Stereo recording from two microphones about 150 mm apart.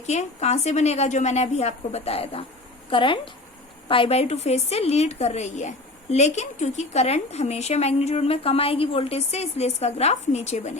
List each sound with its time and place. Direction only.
0.0 s a woman's voice: 50° left (ahead or behind)